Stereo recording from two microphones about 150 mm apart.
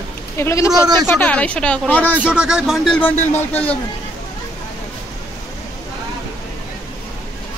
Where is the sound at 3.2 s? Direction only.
40° left (ahead or behind).